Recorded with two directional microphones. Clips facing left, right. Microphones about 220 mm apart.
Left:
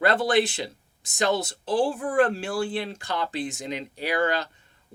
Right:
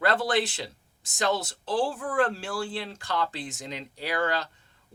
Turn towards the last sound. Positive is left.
turn(degrees=15)  # may be behind; listen again after turning